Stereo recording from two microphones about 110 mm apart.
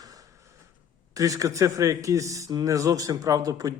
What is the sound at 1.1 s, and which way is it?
Speech, 30° right (ahead or behind).